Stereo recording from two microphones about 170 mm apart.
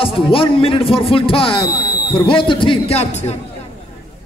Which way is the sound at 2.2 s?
30° left (ahead or behind).